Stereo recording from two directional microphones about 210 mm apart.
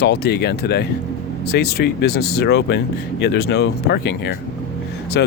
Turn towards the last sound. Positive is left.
turn(degrees=50)  # may be behind; listen again after turning